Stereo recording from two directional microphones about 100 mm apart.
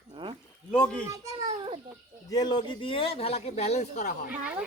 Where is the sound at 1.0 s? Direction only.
30° right (ahead or behind).